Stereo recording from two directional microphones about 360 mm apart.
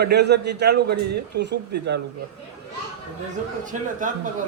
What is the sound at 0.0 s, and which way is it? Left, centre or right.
A man's voice, right.